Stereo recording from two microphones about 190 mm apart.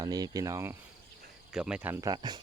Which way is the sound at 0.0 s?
20° right (ahead or behind).